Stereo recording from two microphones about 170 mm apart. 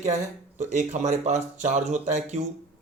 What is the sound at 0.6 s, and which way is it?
Speech, 45° right (ahead or behind).